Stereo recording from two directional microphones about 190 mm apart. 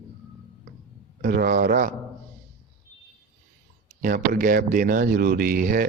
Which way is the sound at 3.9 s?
45° right (ahead or behind).